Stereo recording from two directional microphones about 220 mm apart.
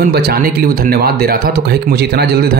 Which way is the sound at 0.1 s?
45° right (ahead or behind).